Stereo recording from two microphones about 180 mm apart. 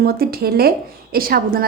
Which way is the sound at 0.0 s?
60° right (ahead or behind).